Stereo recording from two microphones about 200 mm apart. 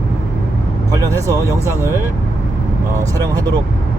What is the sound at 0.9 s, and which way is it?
Speech, 15° right (ahead or behind).